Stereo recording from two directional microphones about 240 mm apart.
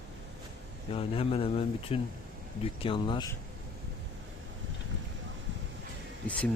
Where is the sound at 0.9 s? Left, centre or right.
Left.